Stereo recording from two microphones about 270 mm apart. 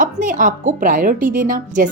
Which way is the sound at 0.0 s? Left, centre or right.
Right.